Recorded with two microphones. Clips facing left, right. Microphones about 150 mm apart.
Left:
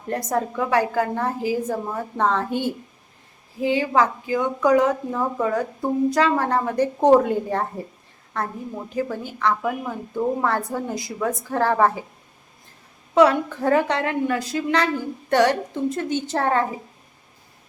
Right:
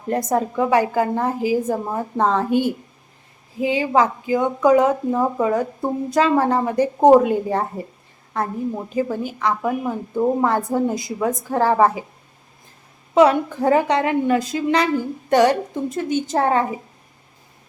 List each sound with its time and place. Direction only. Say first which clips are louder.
0.1 s a woman's voice: right 4 dB; 20° right (ahead or behind)
9.0 s a woman's voice: right 2 dB; 15° right (ahead or behind)
13.1 s a woman's voice: right 2 dB; 15° right (ahead or behind)